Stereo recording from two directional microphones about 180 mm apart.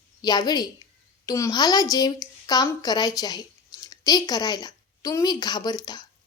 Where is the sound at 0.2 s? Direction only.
20° left (ahead or behind).